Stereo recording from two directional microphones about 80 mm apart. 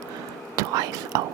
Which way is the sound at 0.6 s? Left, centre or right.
Right.